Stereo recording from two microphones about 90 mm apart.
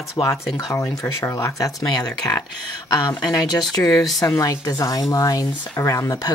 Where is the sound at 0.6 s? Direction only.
35° left (ahead or behind).